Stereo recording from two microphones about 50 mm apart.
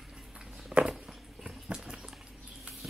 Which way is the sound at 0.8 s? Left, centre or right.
Centre.